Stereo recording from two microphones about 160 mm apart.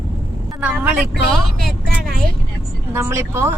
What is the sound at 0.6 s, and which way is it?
Speech, 10° right (ahead or behind).